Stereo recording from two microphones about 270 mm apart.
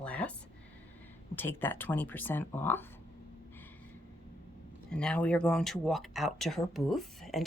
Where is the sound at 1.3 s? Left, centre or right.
Centre.